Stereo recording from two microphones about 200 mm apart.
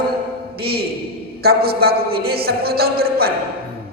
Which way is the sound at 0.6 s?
50° right (ahead or behind).